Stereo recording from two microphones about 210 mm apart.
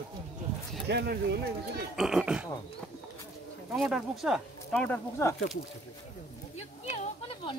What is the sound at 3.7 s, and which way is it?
Speech, centre (ahead or behind).